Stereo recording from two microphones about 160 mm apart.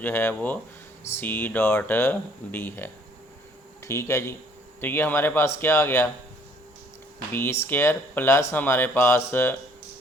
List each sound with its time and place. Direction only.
0.0 s speech: 15° left (ahead or behind)
7.3 s speech: 15° left (ahead or behind)